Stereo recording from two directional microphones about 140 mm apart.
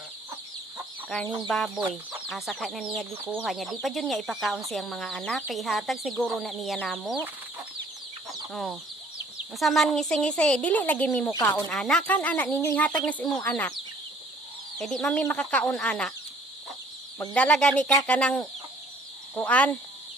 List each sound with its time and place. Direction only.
1.5 s speech: centre (ahead or behind)
3.1 s speech: 15° right (ahead or behind)
3.4 s speech: centre (ahead or behind)
8.5 s speech: centre (ahead or behind); by 11.6 s 20° left (ahead or behind)
11.7 s speech: 5° left (ahead or behind)
14.8 s speech: 5° left (ahead or behind)
17.3 s speech: 10° left (ahead or behind)